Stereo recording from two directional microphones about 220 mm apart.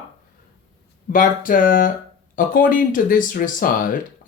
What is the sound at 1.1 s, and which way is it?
Speech, 40° left (ahead or behind).